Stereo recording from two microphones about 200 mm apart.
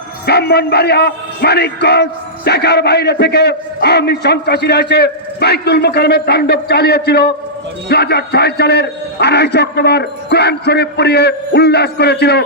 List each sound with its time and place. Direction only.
0.3 s a man's voice: 55° left (ahead or behind)